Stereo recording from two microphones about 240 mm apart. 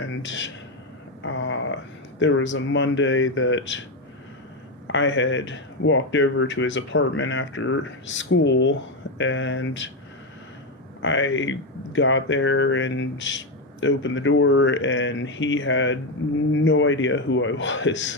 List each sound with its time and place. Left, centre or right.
0.2 s speech: left
4.9 s speech: left
11.0 s speech: left